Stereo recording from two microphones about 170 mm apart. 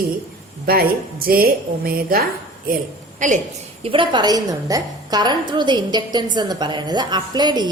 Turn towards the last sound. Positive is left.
turn(degrees=-25)  # may be behind; listen again after turning